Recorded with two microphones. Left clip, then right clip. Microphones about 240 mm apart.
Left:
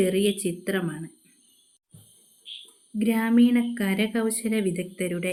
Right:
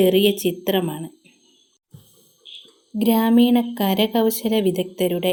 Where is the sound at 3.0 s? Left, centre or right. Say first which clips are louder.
Right 5 dB; centre.